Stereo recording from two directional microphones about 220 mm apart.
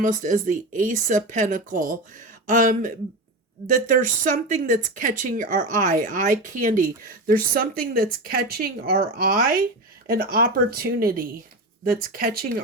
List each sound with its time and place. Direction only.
0.0 s speech: 35° right (ahead or behind)